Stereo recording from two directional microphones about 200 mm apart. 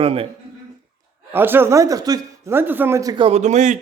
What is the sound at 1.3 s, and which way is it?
A man's voice, 10° right (ahead or behind).